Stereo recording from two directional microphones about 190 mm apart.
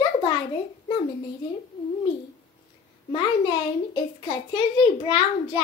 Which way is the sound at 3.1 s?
25° left (ahead or behind).